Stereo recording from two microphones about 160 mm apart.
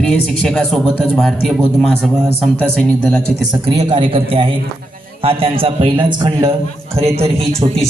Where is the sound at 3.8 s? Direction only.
30° right (ahead or behind).